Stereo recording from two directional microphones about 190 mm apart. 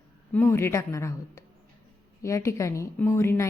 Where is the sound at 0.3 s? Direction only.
10° left (ahead or behind).